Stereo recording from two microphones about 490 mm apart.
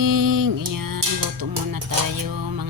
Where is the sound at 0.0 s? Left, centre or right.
Right.